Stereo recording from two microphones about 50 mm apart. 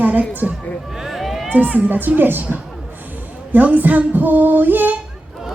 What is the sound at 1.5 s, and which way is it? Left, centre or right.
Speech, right.